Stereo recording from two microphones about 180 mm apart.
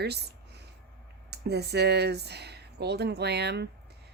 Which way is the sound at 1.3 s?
65° right (ahead or behind).